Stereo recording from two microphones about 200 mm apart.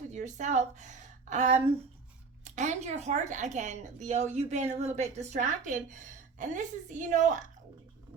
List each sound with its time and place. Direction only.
0.1 s a woman's voice: 35° right (ahead or behind)